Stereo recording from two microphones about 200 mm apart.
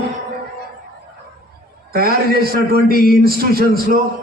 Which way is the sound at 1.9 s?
50° right (ahead or behind).